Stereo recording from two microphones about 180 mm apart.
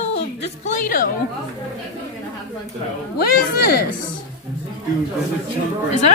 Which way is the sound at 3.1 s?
60° left (ahead or behind).